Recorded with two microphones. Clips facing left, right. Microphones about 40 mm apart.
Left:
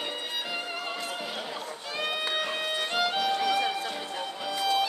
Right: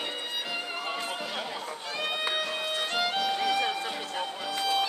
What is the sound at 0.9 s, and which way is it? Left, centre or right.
Music, centre.